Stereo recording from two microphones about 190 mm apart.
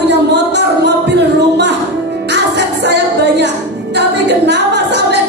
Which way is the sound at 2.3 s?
65° right (ahead or behind).